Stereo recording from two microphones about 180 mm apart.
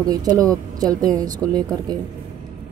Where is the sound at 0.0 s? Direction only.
20° right (ahead or behind).